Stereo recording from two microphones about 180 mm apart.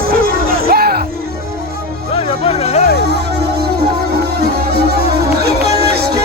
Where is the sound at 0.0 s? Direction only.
55° right (ahead or behind).